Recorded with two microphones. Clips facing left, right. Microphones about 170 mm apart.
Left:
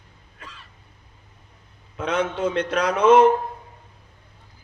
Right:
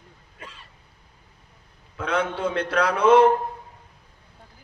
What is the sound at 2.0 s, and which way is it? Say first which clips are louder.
Speech: left 2 dB; 25° left (ahead or behind).